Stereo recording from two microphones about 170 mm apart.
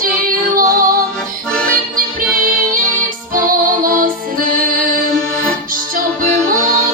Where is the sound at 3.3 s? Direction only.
55° right (ahead or behind).